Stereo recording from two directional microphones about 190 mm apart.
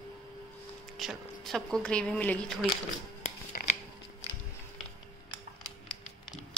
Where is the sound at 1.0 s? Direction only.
Centre (ahead or behind).